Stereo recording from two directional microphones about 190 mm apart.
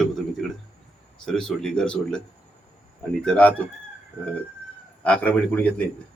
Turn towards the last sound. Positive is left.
turn(degrees=10)  # may be behind; listen again after turning